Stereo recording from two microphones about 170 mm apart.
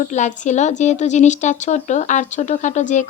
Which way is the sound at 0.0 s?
45° left (ahead or behind).